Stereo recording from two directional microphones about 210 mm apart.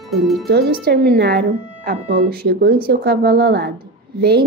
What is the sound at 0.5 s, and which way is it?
Speech, 45° right (ahead or behind).